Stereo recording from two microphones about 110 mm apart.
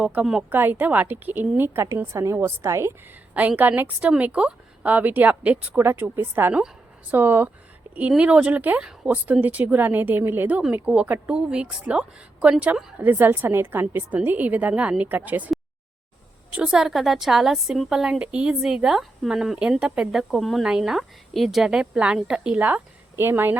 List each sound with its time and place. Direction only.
0.0 s a woman's voice: 10° right (ahead or behind)
3.3 s a woman's voice: 15° right (ahead or behind)
16.5 s a woman's voice: 10° right (ahead or behind)